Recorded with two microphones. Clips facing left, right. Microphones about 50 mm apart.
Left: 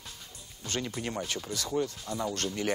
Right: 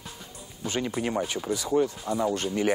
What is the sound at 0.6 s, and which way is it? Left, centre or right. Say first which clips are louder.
Speech: right 6 dB; centre.